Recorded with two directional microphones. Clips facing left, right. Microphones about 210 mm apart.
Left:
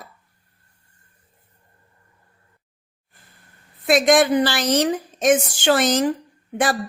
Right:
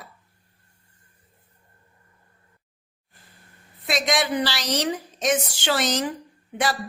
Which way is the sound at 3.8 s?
50° left (ahead or behind).